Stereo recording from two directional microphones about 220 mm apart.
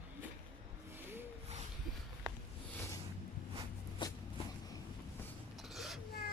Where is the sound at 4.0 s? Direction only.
20° left (ahead or behind).